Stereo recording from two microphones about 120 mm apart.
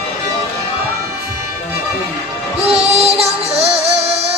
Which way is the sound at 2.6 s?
55° right (ahead or behind).